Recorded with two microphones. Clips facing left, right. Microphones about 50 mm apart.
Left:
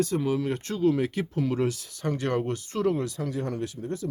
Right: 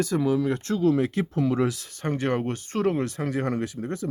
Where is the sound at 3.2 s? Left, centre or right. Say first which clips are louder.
Right 4 dB; right.